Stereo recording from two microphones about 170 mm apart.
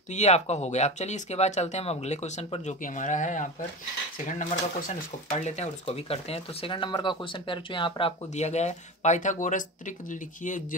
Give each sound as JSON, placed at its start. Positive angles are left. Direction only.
{"t": 0.1, "sound": "speech", "side_deg": 40}